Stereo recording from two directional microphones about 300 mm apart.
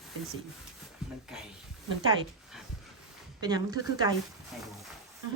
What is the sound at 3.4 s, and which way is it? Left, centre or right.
Speech, centre.